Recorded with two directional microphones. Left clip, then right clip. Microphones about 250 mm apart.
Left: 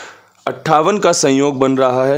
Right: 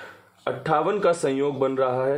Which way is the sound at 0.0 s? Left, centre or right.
Left.